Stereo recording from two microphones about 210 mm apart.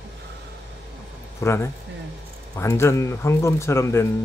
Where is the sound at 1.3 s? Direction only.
10° left (ahead or behind).